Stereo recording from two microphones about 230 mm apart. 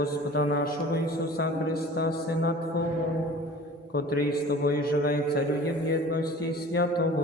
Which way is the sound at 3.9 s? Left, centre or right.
Left.